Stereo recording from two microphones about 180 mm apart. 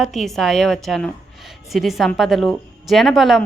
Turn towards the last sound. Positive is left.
turn(degrees=0)  # may be behind; listen again after turning